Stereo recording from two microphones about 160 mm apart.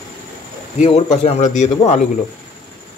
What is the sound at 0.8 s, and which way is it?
Speech, 45° left (ahead or behind).